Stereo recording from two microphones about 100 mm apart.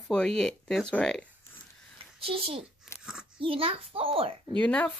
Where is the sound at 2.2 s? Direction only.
70° right (ahead or behind).